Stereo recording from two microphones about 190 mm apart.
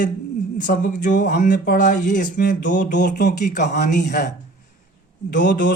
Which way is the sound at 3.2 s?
50° left (ahead or behind).